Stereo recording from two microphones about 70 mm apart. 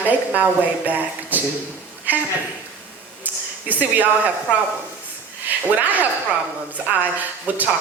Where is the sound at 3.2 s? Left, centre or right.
Right.